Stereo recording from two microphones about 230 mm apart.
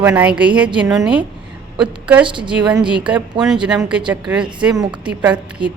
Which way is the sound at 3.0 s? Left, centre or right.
Centre.